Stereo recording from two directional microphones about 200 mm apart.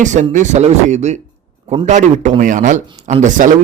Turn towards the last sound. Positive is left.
turn(degrees=-40)  # may be behind; listen again after turning